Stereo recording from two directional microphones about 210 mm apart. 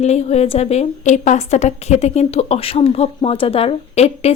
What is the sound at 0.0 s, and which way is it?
A woman's voice, 30° left (ahead or behind).